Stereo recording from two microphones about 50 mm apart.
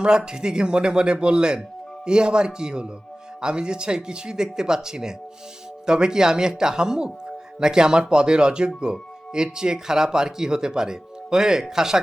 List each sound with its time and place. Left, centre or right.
0.0 s speech: centre